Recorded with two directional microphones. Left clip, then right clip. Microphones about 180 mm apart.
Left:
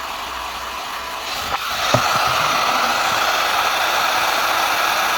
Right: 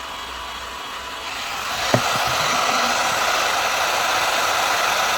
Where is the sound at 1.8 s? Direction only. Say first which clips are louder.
Left 3 dB; centre (ahead or behind).